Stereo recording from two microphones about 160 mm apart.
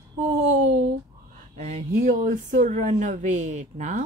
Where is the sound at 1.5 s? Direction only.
50° right (ahead or behind).